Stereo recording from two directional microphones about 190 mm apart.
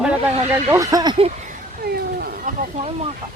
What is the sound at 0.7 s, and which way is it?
Speech, 15° right (ahead or behind).